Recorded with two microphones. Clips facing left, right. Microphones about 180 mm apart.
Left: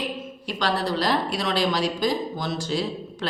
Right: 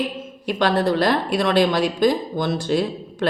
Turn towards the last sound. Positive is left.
turn(degrees=-55)  # may be behind; listen again after turning